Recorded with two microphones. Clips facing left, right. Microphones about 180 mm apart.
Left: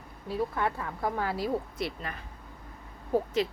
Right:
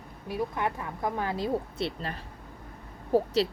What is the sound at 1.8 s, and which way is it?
Speech, 30° right (ahead or behind).